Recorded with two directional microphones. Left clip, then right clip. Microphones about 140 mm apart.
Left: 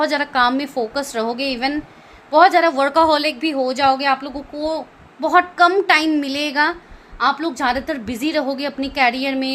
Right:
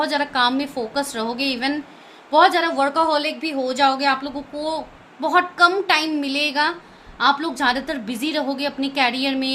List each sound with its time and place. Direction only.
0.0 s a woman's voice: 50° left (ahead or behind)
7.2 s a woman's voice: 40° left (ahead or behind)